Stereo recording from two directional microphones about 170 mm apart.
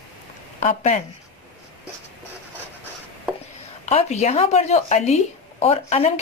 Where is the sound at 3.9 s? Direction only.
40° left (ahead or behind).